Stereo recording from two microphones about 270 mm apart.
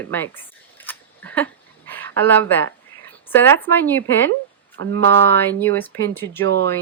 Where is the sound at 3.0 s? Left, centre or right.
Centre.